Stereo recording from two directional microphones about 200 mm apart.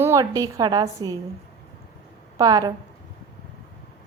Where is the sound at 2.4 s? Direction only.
20° right (ahead or behind).